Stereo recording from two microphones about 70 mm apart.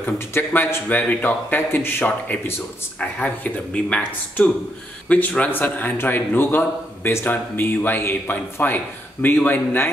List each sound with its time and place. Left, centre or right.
0.0 s a man's voice: left
3.0 s a man's voice: centre